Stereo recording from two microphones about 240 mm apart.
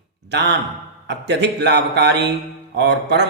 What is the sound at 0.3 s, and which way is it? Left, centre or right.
Speech, right.